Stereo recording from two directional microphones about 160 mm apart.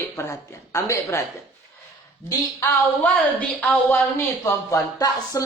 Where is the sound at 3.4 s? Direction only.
10° left (ahead or behind).